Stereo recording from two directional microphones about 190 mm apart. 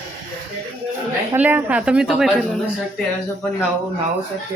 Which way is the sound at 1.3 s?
10° right (ahead or behind).